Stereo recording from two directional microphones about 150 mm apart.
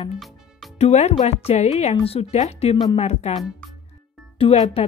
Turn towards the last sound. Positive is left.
turn(degrees=40)  # may be behind; listen again after turning